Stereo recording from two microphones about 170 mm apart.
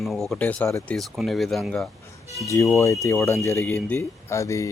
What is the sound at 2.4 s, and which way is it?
Speech, 20° left (ahead or behind).